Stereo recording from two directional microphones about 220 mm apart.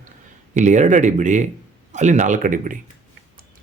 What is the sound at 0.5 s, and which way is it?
Speech, 35° right (ahead or behind).